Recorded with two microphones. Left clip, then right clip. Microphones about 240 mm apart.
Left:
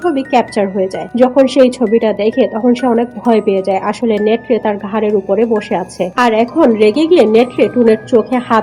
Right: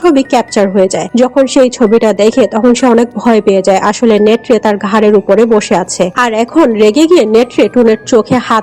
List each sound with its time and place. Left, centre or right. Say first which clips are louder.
0.0 s speech: right 4 dB; right